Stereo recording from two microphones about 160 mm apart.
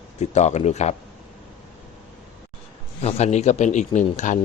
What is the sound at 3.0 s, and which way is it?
A man's voice, 40° left (ahead or behind).